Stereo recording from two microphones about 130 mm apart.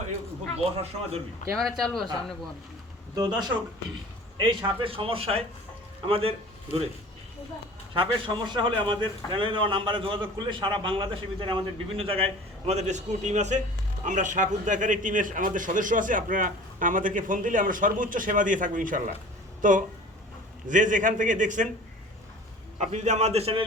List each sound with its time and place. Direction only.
0.6 s a man's voice: 55° right (ahead or behind)
1.5 s a man's voice: centre (ahead or behind)
3.2 s a man's voice: 35° right (ahead or behind)
7.9 s a man's voice: 35° right (ahead or behind); by 21.7 s 75° right (ahead or behind)
22.8 s a man's voice: 65° right (ahead or behind)